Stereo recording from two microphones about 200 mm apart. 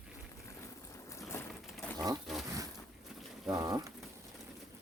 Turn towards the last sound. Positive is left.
turn(degrees=-15)  # may be behind; listen again after turning